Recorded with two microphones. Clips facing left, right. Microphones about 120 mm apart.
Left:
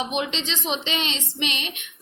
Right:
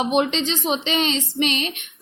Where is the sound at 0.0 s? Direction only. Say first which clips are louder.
Right 7 dB; 40° right (ahead or behind).